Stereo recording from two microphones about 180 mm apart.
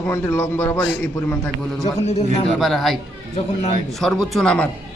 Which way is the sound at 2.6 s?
Centre (ahead or behind).